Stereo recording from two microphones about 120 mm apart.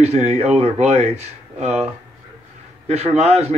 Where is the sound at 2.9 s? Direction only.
60° right (ahead or behind).